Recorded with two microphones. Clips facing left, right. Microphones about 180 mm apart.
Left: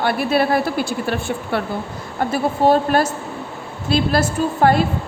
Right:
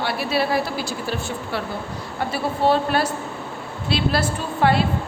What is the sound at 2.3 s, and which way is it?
A woman's voice, 45° left (ahead or behind).